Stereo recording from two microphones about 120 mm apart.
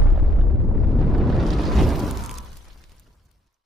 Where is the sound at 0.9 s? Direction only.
Centre (ahead or behind).